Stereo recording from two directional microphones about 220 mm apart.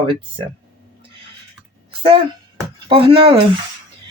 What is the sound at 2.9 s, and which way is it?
Speech, 25° right (ahead or behind).